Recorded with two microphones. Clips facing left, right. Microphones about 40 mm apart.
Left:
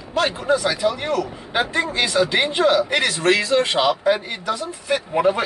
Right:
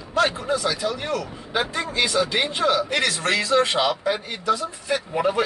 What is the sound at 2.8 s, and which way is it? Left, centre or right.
Speech, left.